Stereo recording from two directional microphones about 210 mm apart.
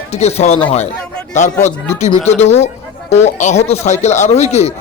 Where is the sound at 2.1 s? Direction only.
30° left (ahead or behind).